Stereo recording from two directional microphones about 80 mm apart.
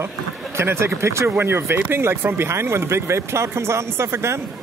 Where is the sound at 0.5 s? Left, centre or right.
Right.